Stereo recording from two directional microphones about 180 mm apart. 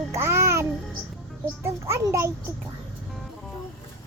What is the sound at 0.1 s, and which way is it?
Music, 15° right (ahead or behind).